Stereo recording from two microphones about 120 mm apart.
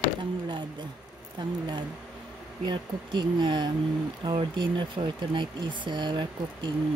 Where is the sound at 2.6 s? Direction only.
40° right (ahead or behind).